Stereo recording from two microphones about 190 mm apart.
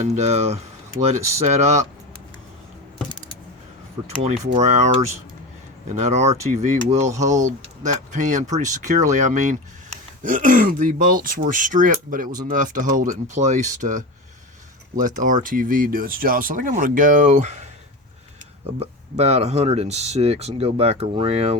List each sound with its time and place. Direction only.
0.0 s speech: 35° right (ahead or behind)
4.0 s speech: 35° right (ahead or behind)